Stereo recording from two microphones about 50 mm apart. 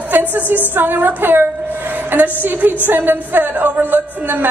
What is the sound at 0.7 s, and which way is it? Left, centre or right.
A woman's voice, right.